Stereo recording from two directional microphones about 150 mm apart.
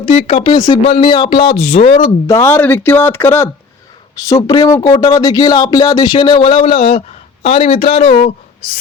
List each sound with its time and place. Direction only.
0.0 s speech: 40° left (ahead or behind)
2.0 s speech: 25° left (ahead or behind); by 8.2 s 40° left (ahead or behind)